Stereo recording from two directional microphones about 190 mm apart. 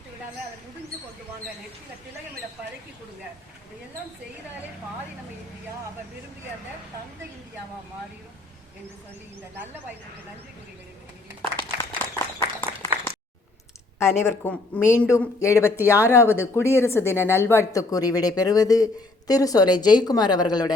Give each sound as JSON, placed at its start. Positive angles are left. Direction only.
{"t": 11.5, "sound": "applause", "side_deg": 15}
{"t": 14.0, "sound": "speech", "side_deg": 15}
{"t": 15.8, "sound": "speech", "side_deg": -10}
{"t": 16.1, "sound": "a woman's voice", "side_deg": 15}